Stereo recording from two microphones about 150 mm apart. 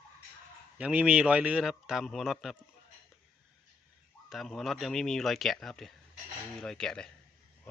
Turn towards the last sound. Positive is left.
turn(degrees=5)  # may be behind; listen again after turning